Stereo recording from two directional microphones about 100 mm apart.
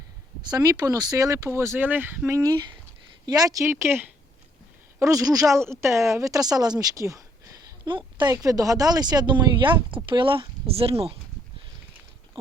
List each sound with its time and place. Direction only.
0.4 s speech: 40° right (ahead or behind); by 2.3 s 20° right (ahead or behind)
2.3 s speech: 40° right (ahead or behind)
7.9 s a woman's voice: 50° right (ahead or behind)
8.3 s speech: 35° right (ahead or behind); by 11.2 s 75° right (ahead or behind)